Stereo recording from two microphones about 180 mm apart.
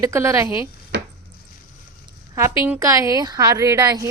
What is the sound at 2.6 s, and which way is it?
A woman's voice, 15° right (ahead or behind).